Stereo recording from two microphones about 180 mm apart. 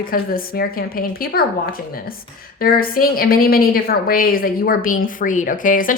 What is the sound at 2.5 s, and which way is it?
A woman's voice, 55° left (ahead or behind).